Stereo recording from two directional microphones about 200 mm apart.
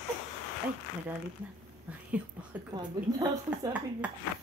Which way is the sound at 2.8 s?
20° right (ahead or behind).